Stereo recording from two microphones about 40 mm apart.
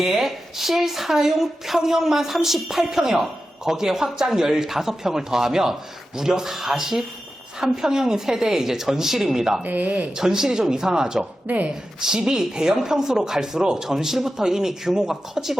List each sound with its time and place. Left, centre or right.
0.0 s a woman's voice: centre
9.6 s speech: right
10.2 s a woman's voice: centre
11.4 s speech: right
11.9 s a woman's voice: centre